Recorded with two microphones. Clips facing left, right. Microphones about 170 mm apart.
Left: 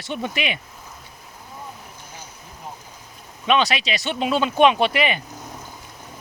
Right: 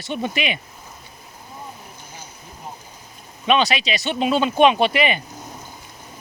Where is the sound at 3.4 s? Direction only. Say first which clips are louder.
Right 1 dB; 25° right (ahead or behind).